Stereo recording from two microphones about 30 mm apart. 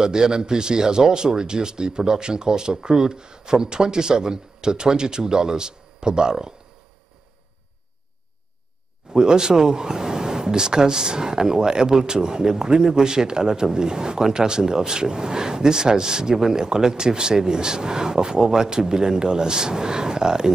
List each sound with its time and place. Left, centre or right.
0.0 s speech: right
9.1 s speech: right